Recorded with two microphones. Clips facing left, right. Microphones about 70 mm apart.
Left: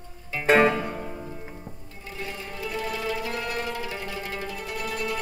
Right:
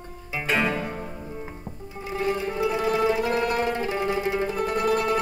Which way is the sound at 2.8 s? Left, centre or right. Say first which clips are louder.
Right 8 dB; right.